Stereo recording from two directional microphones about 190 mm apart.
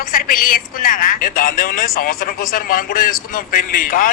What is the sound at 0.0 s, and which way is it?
A man's voice, 45° left (ahead or behind).